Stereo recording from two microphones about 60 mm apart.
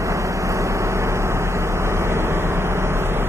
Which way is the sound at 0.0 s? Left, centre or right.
Right.